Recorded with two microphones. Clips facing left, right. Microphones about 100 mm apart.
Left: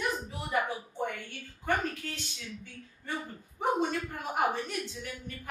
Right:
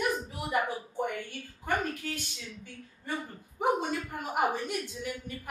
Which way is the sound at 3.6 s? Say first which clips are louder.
Even; 15° right (ahead or behind).